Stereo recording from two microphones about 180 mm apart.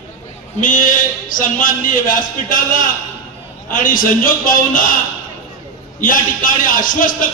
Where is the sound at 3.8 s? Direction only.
50° left (ahead or behind).